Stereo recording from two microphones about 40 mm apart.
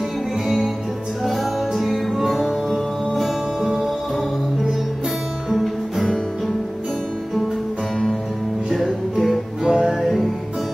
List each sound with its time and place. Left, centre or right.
1.2 s music: centre
5.5 s music: centre
8.6 s music: centre
9.7 s music: centre